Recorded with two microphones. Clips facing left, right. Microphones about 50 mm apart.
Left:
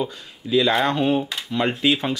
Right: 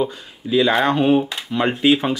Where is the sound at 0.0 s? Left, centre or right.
Centre.